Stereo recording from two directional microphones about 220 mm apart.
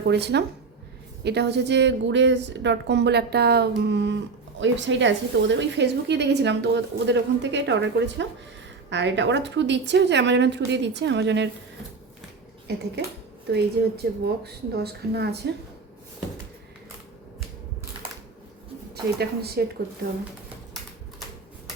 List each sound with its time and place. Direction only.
0.1 s a woman's voice: 50° right (ahead or behind)
13.5 s a woman's voice: 45° right (ahead or behind)
19.2 s a woman's voice: 45° right (ahead or behind)